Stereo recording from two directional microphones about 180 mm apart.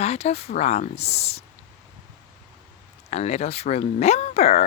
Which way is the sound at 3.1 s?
40° left (ahead or behind).